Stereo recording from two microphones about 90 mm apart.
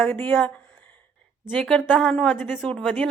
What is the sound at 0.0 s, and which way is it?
Speech, 20° left (ahead or behind).